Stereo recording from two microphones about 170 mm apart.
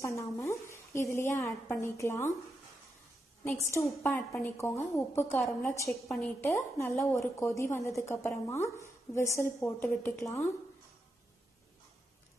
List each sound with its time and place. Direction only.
0.0 s a woman's voice: 15° left (ahead or behind)
3.7 s a woman's voice: 15° left (ahead or behind)